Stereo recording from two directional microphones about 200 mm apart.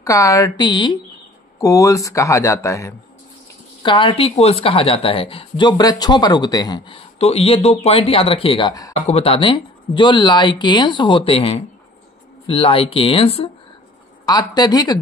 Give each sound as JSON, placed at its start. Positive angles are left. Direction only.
{"t": 0.0, "sound": "speech", "side_deg": 15}